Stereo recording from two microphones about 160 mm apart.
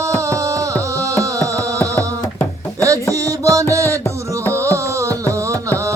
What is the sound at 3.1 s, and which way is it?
Music, 20° right (ahead or behind).